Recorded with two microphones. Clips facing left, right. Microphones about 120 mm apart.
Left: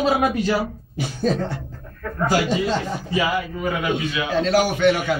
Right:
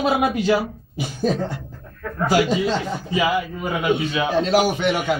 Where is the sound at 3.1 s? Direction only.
15° right (ahead or behind).